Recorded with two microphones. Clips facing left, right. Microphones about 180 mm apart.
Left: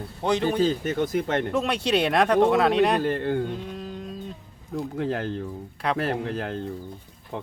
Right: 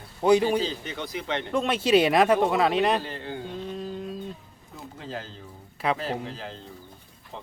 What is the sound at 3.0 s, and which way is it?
Speech, 55° left (ahead or behind).